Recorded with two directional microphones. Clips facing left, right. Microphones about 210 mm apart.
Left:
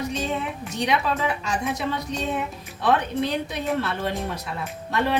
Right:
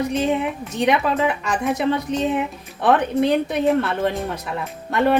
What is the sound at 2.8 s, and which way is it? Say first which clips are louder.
Speech: right 5 dB; 55° right (ahead or behind).